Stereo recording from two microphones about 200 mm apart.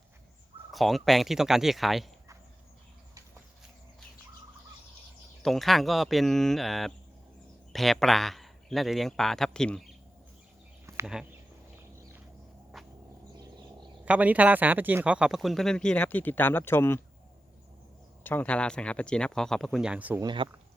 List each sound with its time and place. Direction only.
0.7 s speech: centre (ahead or behind)
5.4 s a man's voice: centre (ahead or behind)
11.0 s speech: centre (ahead or behind)
12.7 s music: centre (ahead or behind)
13.3 s bird: 20° right (ahead or behind)
14.0 s speech: 5° right (ahead or behind); by 17.0 s 10° left (ahead or behind)
18.2 s speech: 10° left (ahead or behind); by 20.2 s 10° right (ahead or behind)
20.2 s speech: 25° right (ahead or behind)